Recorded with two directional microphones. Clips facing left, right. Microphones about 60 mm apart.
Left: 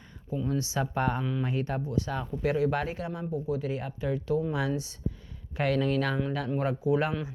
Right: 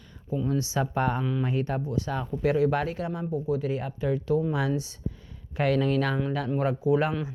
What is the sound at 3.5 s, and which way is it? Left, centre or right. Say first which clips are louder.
Speech: right 4 dB; right.